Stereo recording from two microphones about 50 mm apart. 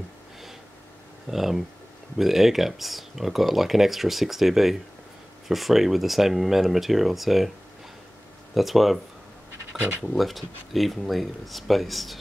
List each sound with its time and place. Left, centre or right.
1.3 s speech: centre
8.5 s speech: centre
9.7 s speech: right
10.1 s speech: centre